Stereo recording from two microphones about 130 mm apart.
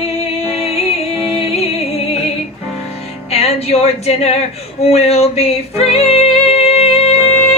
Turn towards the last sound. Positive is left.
turn(degrees=55)  # may be behind; listen again after turning